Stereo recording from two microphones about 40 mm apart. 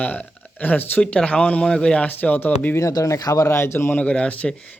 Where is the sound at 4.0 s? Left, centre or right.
Left.